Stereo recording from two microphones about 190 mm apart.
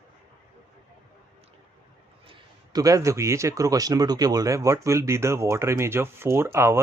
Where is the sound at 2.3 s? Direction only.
20° right (ahead or behind).